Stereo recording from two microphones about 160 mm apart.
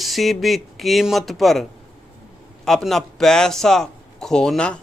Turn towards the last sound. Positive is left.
turn(degrees=5)  # may be behind; listen again after turning